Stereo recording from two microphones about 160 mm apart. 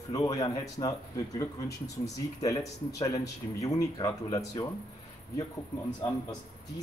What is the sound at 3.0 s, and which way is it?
Speech, 20° left (ahead or behind).